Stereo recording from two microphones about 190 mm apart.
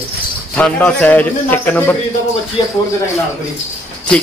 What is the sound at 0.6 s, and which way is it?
Speech, 10° left (ahead or behind).